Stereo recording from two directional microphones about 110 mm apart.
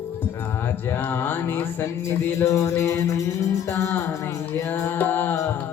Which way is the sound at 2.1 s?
25° left (ahead or behind).